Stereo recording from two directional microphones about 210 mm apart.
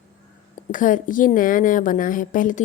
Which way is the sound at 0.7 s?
40° left (ahead or behind).